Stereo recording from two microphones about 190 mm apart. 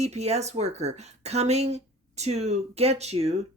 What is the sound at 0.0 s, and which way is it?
A woman's voice, 35° right (ahead or behind).